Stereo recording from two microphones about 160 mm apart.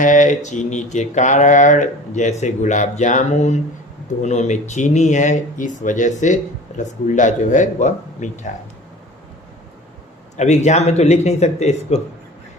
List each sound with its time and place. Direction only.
0.0 s speech: 55° left (ahead or behind)
10.3 s speech: 45° left (ahead or behind)